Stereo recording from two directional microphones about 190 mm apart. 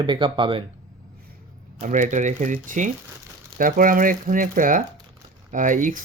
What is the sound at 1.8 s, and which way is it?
Speech, 45° right (ahead or behind).